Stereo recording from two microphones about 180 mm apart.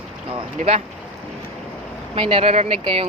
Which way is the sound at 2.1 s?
30° right (ahead or behind).